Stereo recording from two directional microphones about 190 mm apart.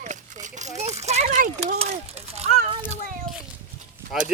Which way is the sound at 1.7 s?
35° right (ahead or behind).